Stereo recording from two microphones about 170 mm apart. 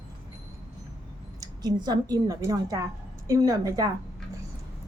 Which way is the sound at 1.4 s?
25° right (ahead or behind).